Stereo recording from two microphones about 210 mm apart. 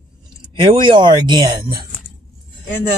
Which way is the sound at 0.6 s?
25° right (ahead or behind).